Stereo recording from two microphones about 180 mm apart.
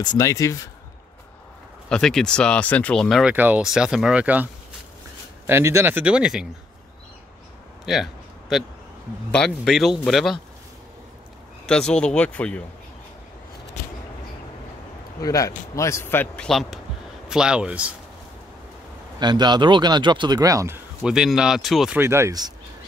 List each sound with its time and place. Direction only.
0.0 s speech: 20° left (ahead or behind)
1.9 s speech: 5° left (ahead or behind)
5.5 s speech: 15° right (ahead or behind)
7.8 s a sound: centre (ahead or behind)
9.3 s speech: 5° left (ahead or behind)
11.6 s speech: 5° left (ahead or behind)
15.2 s speech: 20° left (ahead or behind); by 17.9 s 5° right (ahead or behind)
19.1 s speech: 25° right (ahead or behind); by 22.0 s centre (ahead or behind)
22.0 s speech: 15° right (ahead or behind)